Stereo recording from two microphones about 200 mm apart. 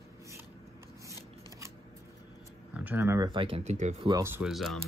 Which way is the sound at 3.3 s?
25° right (ahead or behind).